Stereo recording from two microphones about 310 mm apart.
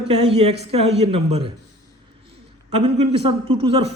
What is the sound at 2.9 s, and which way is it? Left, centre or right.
Speech, centre.